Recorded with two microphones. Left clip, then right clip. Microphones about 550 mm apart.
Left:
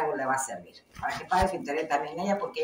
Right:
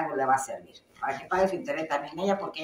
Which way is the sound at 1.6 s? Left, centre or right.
Right.